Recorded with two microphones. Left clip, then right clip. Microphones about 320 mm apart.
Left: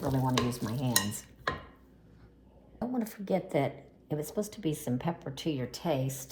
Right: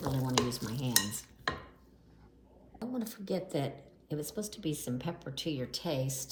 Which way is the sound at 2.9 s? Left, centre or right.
Centre.